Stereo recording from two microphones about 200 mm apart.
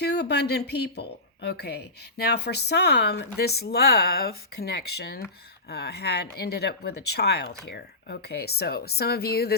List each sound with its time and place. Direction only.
0.0 s a woman's voice: 55° left (ahead or behind)